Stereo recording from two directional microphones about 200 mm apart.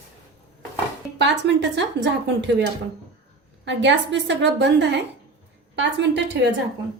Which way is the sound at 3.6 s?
65° right (ahead or behind).